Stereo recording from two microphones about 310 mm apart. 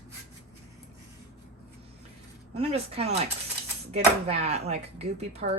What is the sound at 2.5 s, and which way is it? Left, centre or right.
Speech, centre.